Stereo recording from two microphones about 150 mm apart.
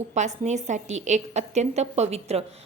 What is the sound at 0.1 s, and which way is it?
A woman's voice, 50° right (ahead or behind).